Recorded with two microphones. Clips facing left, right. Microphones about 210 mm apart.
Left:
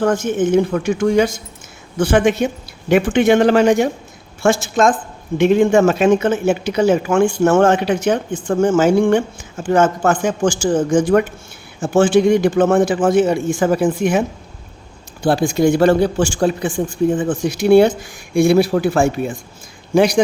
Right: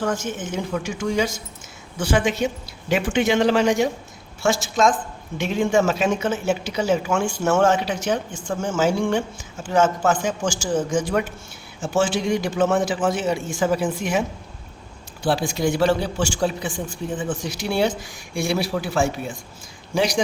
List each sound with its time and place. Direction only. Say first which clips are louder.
0.0 s a man's voice: left 9 dB; 55° left (ahead or behind)